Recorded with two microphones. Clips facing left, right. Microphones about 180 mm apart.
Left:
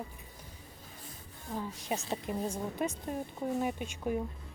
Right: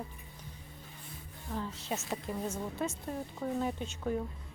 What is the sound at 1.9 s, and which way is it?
Speech, 30° left (ahead or behind).